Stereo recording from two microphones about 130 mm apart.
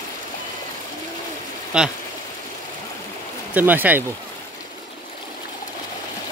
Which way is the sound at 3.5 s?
15° right (ahead or behind).